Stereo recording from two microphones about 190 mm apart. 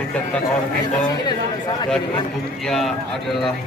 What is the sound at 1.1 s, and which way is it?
Speech, 20° left (ahead or behind).